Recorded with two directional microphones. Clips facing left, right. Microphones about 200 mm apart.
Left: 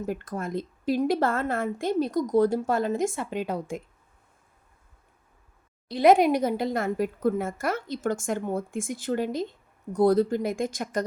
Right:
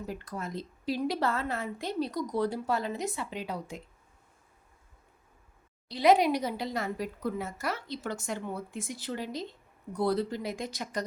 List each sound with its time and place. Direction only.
0.0 s speech: 50° left (ahead or behind)
5.9 s speech: 50° left (ahead or behind)